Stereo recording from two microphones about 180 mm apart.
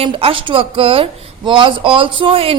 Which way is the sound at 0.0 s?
30° right (ahead or behind).